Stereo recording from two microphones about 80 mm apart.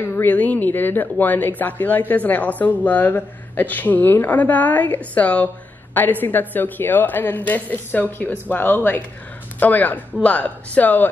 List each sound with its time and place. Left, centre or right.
0.0 s speech: left